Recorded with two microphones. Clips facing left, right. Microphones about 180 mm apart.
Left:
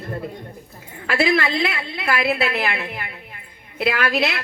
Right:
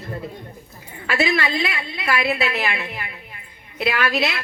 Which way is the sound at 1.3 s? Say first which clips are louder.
Left 2 dB; 70° left (ahead or behind).